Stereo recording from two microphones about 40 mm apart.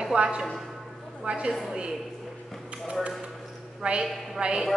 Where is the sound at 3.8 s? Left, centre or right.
Right.